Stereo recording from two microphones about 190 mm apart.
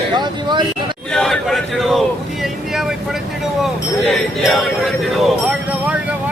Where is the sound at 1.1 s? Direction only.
Centre (ahead or behind).